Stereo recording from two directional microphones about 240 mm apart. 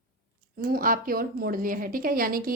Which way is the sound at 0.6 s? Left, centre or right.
Right.